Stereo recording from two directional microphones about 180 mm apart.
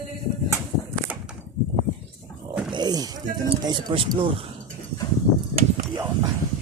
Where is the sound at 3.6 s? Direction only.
25° right (ahead or behind).